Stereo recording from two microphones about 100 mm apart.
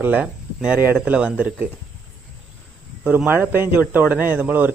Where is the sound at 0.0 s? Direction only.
15° right (ahead or behind).